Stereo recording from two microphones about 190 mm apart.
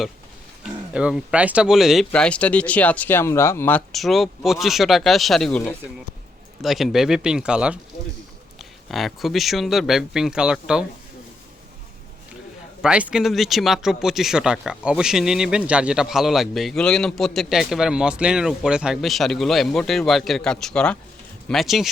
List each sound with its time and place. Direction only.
0.6 s speech: 5° right (ahead or behind)
12.8 s speech: 5° right (ahead or behind)